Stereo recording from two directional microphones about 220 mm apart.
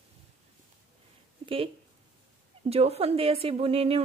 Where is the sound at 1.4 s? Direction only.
25° right (ahead or behind).